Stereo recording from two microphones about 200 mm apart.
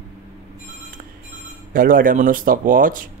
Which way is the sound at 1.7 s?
45° right (ahead or behind).